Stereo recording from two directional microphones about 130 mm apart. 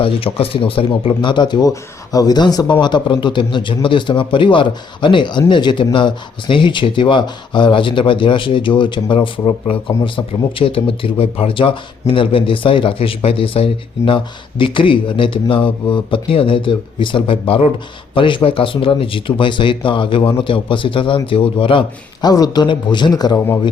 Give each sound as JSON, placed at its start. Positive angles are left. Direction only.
{"t": 0.0, "sound": "speech", "side_deg": 45}